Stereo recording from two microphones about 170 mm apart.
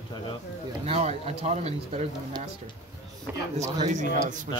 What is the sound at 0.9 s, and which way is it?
Speech, 40° right (ahead or behind).